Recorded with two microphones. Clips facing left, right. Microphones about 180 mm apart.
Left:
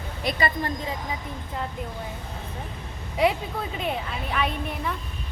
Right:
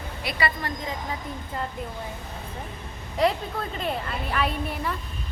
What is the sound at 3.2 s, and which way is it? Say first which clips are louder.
A woman's voice: left 1 dB; 5° left (ahead or behind).